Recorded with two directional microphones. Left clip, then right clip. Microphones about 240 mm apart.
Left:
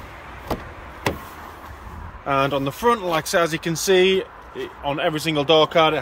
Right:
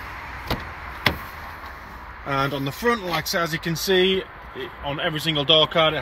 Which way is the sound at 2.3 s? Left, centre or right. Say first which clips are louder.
Left 4 dB; centre.